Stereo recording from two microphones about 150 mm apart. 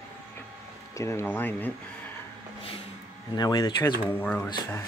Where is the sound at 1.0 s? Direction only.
20° left (ahead or behind).